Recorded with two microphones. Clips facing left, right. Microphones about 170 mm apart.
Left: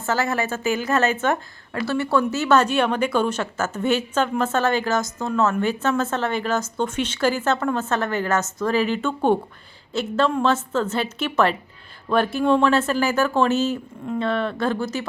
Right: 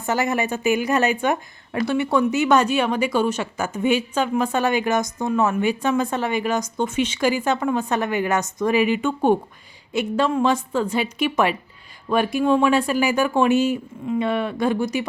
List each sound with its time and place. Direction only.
0.0 s speech: 15° right (ahead or behind)